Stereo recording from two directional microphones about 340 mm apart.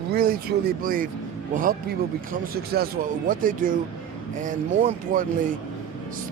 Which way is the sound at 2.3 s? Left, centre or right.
Right.